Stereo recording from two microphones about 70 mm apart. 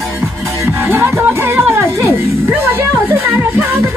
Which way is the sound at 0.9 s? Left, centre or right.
Right.